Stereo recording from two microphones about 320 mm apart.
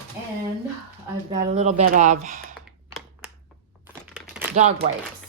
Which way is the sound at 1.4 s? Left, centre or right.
Right.